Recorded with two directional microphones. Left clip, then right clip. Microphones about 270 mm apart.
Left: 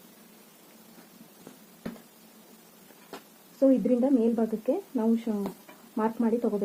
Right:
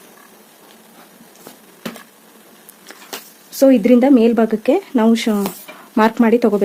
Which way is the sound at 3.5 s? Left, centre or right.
Right.